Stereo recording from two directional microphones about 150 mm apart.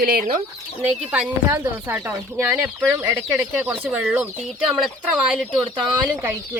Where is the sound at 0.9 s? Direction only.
5° right (ahead or behind).